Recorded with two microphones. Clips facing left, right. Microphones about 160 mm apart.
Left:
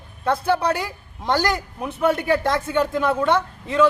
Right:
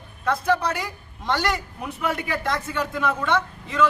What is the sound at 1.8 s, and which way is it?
A man's voice, 30° left (ahead or behind).